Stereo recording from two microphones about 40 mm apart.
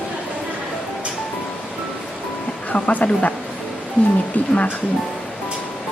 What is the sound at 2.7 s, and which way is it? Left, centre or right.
Speech, left.